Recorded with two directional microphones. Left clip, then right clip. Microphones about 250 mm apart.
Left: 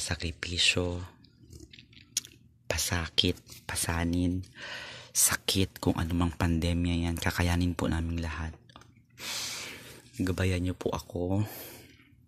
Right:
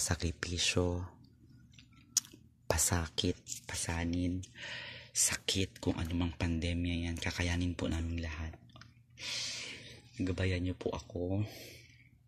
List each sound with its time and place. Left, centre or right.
0.1 s speech: centre
2.2 s chewing: centre
2.7 s speech: centre; by 11.8 s left